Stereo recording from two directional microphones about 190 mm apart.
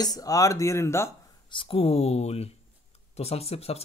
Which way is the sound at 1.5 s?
25° left (ahead or behind).